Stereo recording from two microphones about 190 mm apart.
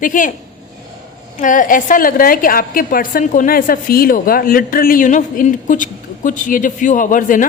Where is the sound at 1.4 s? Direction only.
45° left (ahead or behind).